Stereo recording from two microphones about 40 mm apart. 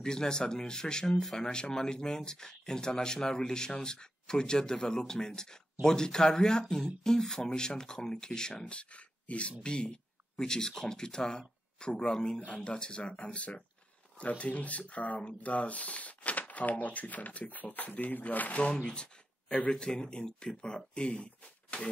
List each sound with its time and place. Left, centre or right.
0.0 s speech: centre; by 18.6 s left
18.6 s speech: left